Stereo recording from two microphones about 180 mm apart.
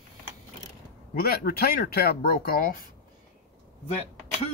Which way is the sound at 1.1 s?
55° left (ahead or behind).